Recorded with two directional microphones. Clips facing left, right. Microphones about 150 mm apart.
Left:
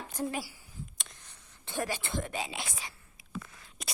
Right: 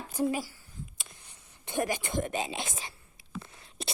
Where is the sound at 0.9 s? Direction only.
10° right (ahead or behind).